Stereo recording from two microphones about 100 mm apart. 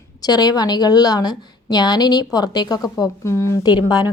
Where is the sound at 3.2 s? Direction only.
30° left (ahead or behind).